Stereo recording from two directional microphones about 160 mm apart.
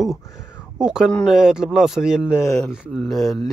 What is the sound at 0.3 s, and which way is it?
Speech, 15° left (ahead or behind).